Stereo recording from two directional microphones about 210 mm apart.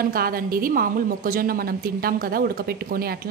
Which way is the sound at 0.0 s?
45° right (ahead or behind).